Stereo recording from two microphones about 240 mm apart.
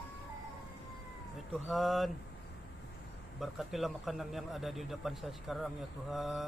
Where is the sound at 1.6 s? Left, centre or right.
Centre.